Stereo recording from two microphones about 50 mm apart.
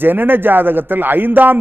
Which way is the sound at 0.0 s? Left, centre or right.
Right.